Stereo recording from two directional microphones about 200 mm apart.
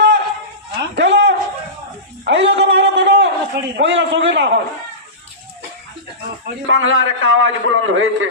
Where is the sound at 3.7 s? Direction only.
60° right (ahead or behind).